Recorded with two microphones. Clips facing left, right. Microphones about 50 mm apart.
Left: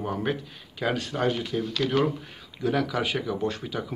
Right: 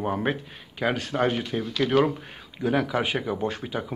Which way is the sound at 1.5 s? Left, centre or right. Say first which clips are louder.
Right 5 dB; centre.